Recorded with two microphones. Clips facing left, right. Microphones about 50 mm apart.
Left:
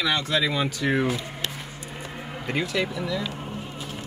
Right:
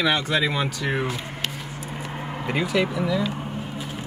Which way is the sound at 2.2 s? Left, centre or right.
Right.